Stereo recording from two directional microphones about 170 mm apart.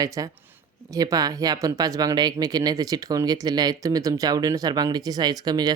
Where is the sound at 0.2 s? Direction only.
20° right (ahead or behind).